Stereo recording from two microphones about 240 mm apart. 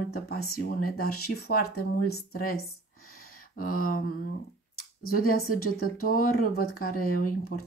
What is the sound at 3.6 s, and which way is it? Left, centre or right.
Speech, left.